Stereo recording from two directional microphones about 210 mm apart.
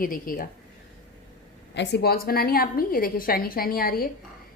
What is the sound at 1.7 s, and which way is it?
A woman's voice, 55° left (ahead or behind).